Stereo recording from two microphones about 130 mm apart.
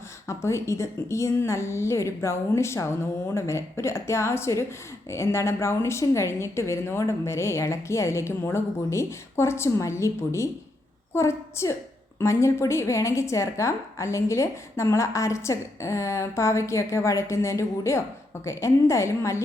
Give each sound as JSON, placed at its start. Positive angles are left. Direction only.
{"t": 0.3, "sound": "a woman's voice", "side_deg": 20}